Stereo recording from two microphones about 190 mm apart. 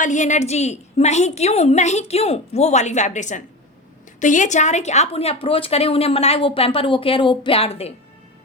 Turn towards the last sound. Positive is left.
turn(degrees=30)  # may be behind; listen again after turning